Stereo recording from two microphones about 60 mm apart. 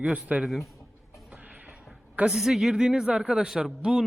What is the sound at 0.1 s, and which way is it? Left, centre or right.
Speech, right.